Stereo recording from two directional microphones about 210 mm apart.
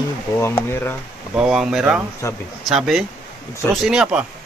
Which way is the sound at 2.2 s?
15° left (ahead or behind).